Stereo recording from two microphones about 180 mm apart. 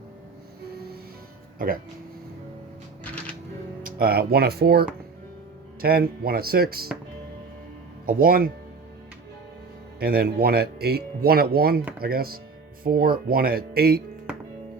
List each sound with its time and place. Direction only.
1.5 s speech: 50° right (ahead or behind)
3.8 s speech: 55° right (ahead or behind)
8.0 s speech: 50° right (ahead or behind)
10.0 s speech: 55° right (ahead or behind)
14.3 s music: 5° right (ahead or behind)